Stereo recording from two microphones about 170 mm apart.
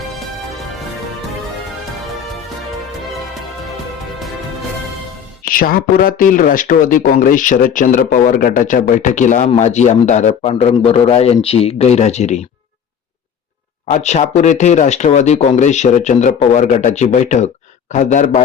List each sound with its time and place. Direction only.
5.5 s speech: 55° left (ahead or behind)
13.8 s speech: 45° left (ahead or behind)